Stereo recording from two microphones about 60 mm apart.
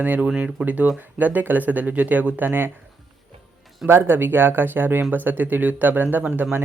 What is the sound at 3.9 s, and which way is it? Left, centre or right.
Speech, right.